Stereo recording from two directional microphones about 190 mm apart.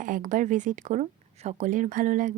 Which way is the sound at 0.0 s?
45° right (ahead or behind).